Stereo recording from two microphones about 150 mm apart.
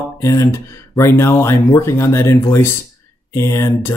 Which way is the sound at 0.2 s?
20° left (ahead or behind).